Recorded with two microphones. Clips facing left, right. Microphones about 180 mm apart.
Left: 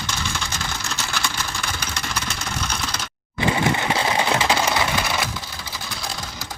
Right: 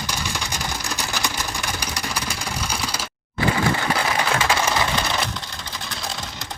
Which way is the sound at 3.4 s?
20° left (ahead or behind).